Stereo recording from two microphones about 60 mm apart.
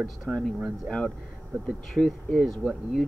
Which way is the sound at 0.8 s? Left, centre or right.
Centre.